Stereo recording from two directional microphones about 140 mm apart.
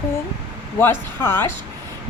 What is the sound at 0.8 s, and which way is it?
Speech, 15° left (ahead or behind).